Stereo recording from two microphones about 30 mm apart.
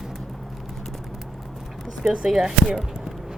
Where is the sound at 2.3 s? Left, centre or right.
Centre.